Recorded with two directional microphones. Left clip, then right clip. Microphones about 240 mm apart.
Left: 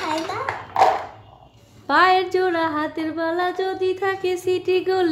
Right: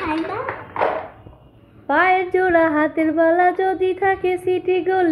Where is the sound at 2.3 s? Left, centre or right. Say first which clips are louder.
Right 5 dB; centre.